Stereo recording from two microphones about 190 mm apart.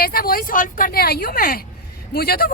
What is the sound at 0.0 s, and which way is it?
Speech, 50° left (ahead or behind).